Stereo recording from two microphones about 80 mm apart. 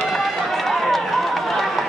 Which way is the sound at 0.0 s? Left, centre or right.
Centre.